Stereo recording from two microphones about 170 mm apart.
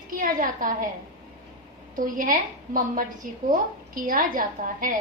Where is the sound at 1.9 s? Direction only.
55° right (ahead or behind).